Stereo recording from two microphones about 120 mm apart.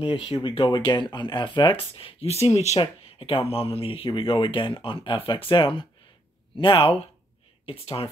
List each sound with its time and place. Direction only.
0.2 s speech: 50° left (ahead or behind)
2.8 s speech: 50° left (ahead or behind)